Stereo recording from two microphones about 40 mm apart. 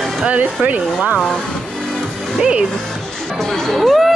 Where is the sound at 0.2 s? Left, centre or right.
Right.